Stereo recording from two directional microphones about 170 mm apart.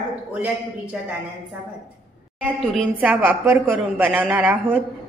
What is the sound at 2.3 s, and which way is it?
A woman's voice, 10° right (ahead or behind).